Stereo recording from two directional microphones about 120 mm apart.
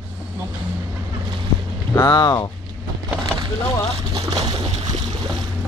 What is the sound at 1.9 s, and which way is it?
Speech, 30° left (ahead or behind).